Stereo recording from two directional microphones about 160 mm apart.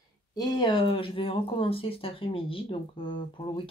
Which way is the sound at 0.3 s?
25° left (ahead or behind).